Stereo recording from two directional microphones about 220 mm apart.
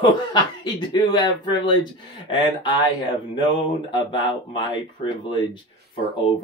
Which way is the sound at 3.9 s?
20° left (ahead or behind).